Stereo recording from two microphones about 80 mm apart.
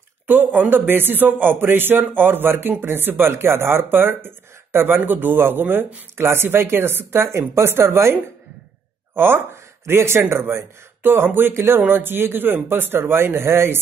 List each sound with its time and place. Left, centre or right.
0.3 s speech: right